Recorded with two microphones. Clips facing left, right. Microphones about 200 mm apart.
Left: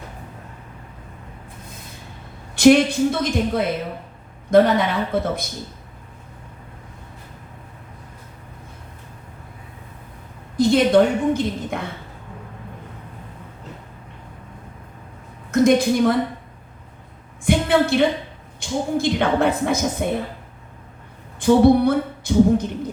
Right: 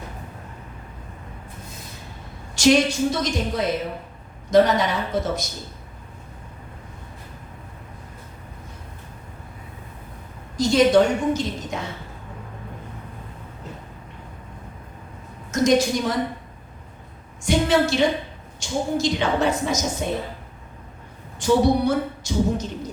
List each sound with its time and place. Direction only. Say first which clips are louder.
2.6 s a woman's voice: left 4 dB; 55° left (ahead or behind)
10.6 s a woman's voice: left 1 dB; 55° left (ahead or behind)
15.5 s a woman's voice: left 3 dB; 55° left (ahead or behind)
17.4 s a sound: left 1 dB; 55° left (ahead or behind)
18.6 s a woman's voice: left 2 dB; 55° left (ahead or behind)
21.3 s speech: left 5 dB; 55° left (ahead or behind)